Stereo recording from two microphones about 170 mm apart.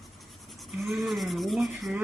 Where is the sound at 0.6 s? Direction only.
Centre (ahead or behind).